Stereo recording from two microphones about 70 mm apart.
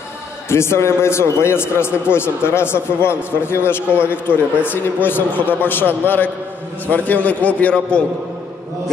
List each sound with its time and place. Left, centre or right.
0.5 s a man's voice: left; by 8.0 s centre